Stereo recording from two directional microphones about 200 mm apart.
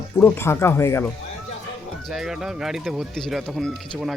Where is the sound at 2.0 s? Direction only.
Centre (ahead or behind).